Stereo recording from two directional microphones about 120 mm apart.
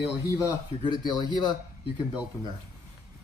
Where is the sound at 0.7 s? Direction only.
60° left (ahead or behind).